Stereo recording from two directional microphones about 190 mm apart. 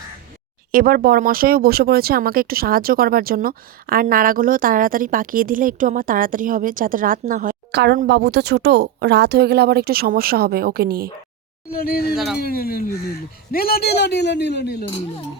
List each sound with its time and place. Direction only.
0.7 s speech: 50° right (ahead or behind)
11.7 s speech: 50° left (ahead or behind)
12.1 s speech: centre (ahead or behind)
12.4 s a man's voice: 50° left (ahead or behind)